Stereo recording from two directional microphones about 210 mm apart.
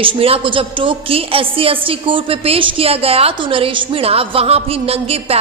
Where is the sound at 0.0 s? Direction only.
25° right (ahead or behind).